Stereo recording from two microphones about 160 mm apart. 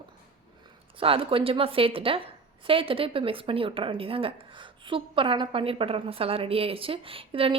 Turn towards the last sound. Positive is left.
turn(degrees=-35)  # may be behind; listen again after turning